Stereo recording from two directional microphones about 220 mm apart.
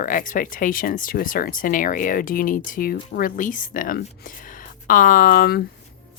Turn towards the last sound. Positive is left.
turn(degrees=40)  # may be behind; listen again after turning